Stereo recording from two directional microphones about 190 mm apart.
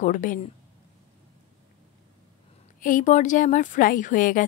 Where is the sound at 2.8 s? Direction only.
45° left (ahead or behind).